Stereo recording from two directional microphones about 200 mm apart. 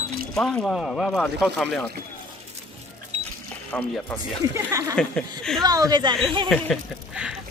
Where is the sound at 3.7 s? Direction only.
10° left (ahead or behind).